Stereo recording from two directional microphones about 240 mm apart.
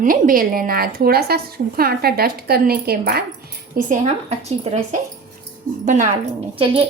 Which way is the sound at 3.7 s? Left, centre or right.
Right.